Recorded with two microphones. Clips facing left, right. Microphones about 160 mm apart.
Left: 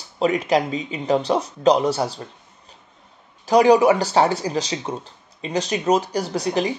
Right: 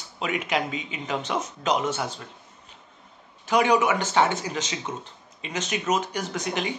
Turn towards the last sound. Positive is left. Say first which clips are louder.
# left 7 dB
turn(degrees=35)  # may be behind; listen again after turning